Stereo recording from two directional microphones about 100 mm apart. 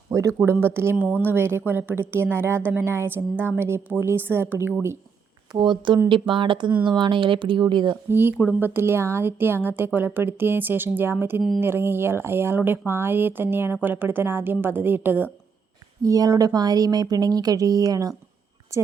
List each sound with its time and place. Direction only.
0.1 s a sound: 35° right (ahead or behind)
0.4 s a woman's voice: 25° right (ahead or behind)
5.5 s speech: 50° right (ahead or behind)
8.1 s a woman's voice: 20° right (ahead or behind)
16.0 s a woman's voice: 35° right (ahead or behind)